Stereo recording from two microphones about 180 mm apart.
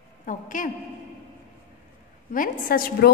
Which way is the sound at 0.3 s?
45° left (ahead or behind).